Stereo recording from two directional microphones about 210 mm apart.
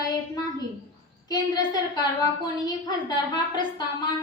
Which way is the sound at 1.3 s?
20° left (ahead or behind).